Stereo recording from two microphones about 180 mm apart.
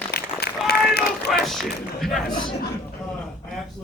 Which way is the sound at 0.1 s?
60° left (ahead or behind).